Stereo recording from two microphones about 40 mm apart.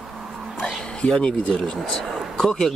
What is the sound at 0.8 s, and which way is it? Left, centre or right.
Speech, left.